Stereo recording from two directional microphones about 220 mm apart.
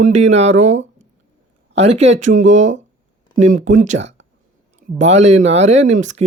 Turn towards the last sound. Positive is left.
turn(degrees=-30)  # may be behind; listen again after turning